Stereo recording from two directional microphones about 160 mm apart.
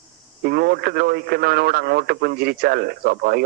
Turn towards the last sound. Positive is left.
turn(degrees=-75)  # may be behind; listen again after turning